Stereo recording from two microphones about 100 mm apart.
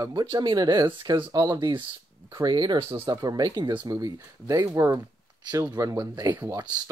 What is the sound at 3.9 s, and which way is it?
Speech, 35° right (ahead or behind).